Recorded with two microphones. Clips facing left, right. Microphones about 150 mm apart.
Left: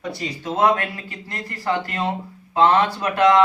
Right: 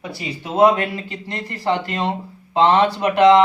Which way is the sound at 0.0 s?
10° right (ahead or behind).